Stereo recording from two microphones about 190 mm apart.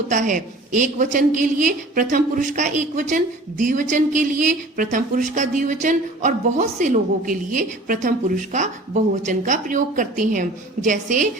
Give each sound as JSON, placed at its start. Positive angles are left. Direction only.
{"t": 0.1, "sound": "a woman's voice", "side_deg": -40}